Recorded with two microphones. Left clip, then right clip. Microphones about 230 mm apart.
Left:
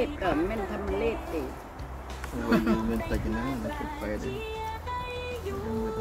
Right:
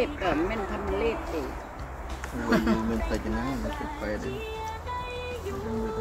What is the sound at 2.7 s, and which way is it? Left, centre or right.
Speech, centre.